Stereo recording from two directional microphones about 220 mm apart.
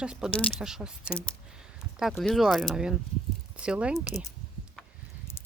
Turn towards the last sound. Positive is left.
turn(degrees=-5)  # may be behind; listen again after turning